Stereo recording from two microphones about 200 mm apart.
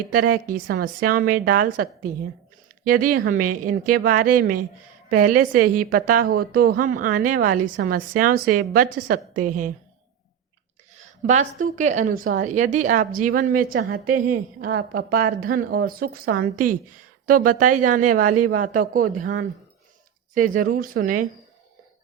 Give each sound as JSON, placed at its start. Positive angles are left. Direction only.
{"t": 0.1, "sound": "a woman's voice", "side_deg": -45}
{"t": 11.0, "sound": "a woman's voice", "side_deg": -35}